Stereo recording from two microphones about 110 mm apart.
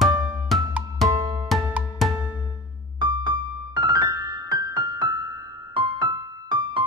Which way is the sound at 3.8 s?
40° right (ahead or behind).